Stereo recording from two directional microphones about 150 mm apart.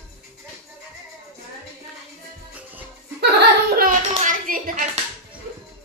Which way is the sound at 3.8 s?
60° right (ahead or behind).